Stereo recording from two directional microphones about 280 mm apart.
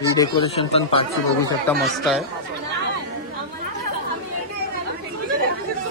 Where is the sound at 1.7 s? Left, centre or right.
Centre.